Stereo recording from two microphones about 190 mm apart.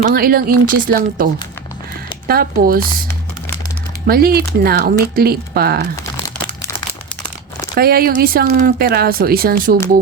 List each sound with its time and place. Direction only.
0.0 s speech: 50° right (ahead or behind)
4.0 s speech: 55° right (ahead or behind)
7.8 s speech: 50° right (ahead or behind)